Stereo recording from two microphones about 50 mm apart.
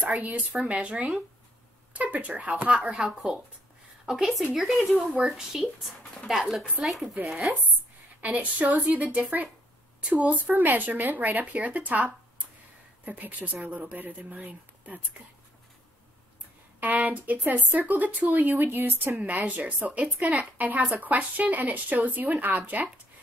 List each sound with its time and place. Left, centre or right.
0.0 s a woman's voice: right
4.0 s a sound: centre
4.6 s speech: centre
8.2 s a woman's voice: right
16.8 s a woman's voice: right